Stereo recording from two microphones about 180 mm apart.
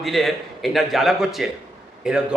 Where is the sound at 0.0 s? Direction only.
Centre (ahead or behind).